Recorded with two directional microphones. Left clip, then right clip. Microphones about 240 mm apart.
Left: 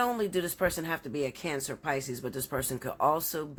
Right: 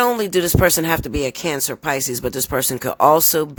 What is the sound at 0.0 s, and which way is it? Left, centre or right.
Speech, right.